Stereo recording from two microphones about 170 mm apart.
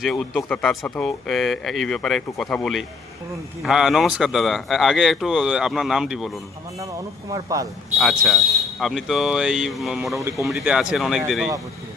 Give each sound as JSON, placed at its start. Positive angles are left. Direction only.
{"t": 0.0, "sound": "speech", "side_deg": 0}
{"t": 7.3, "sound": "speech", "side_deg": -20}
{"t": 7.9, "sound": "speech", "side_deg": 0}